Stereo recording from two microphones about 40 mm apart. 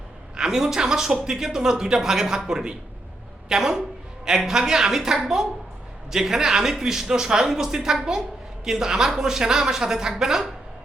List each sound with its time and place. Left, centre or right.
0.3 s a man's voice: centre